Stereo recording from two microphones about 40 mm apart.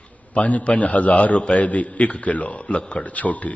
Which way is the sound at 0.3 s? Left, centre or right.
Left.